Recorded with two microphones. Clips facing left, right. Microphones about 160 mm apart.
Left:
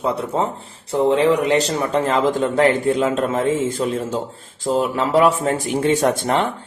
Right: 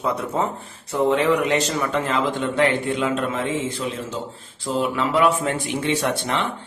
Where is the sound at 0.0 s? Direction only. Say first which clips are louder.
Left 2 dB; 30° left (ahead or behind).